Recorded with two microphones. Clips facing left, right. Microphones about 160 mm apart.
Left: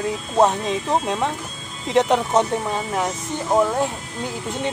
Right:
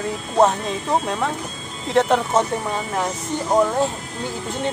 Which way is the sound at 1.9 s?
15° left (ahead or behind).